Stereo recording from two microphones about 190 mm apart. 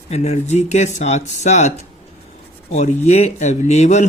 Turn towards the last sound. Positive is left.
turn(degrees=35)  # may be behind; listen again after turning